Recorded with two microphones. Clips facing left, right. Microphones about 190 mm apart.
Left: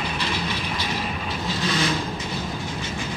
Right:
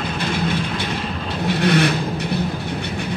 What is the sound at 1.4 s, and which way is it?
Vehicle, 65° right (ahead or behind).